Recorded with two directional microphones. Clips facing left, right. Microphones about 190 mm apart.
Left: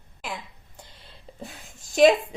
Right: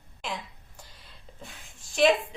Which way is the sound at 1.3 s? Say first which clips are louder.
Left 8 dB; 35° left (ahead or behind).